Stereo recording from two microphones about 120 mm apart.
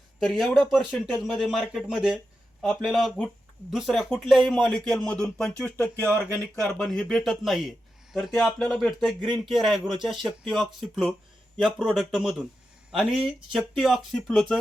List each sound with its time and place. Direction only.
0.2 s speech: centre (ahead or behind); by 6.1 s 20° left (ahead or behind)
6.8 s speech: 5° left (ahead or behind)